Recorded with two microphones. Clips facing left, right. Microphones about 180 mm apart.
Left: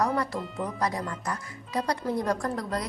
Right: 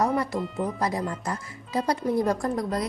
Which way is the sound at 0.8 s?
25° right (ahead or behind).